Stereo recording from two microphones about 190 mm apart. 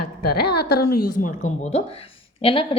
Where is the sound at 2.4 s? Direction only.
30° left (ahead or behind).